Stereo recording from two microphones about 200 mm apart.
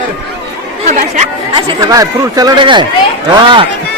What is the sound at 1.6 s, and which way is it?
Speech, 20° right (ahead or behind).